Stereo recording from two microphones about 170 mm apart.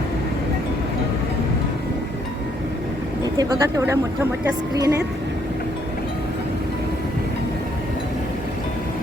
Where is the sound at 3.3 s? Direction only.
15° right (ahead or behind).